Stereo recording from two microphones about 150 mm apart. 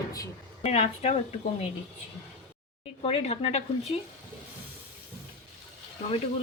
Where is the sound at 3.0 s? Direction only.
40° left (ahead or behind).